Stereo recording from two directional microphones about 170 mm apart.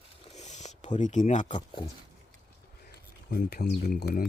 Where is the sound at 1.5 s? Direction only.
25° left (ahead or behind).